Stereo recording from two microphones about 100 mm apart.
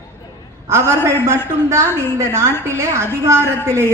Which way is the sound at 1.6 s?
25° right (ahead or behind).